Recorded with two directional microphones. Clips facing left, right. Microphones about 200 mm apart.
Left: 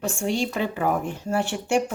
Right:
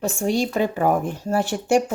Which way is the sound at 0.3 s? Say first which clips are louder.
Right 4 dB; 40° right (ahead or behind).